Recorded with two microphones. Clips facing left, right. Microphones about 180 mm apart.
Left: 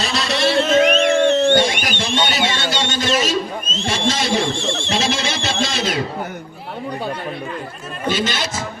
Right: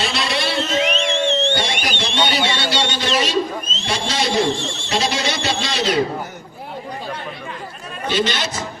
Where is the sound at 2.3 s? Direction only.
45° left (ahead or behind).